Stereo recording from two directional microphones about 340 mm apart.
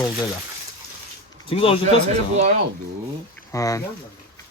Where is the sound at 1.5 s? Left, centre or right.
Centre.